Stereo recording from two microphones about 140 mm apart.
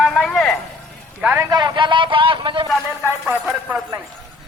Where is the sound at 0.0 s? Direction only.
Centre (ahead or behind).